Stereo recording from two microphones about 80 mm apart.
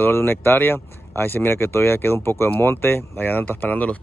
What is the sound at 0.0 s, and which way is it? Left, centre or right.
Speech, left.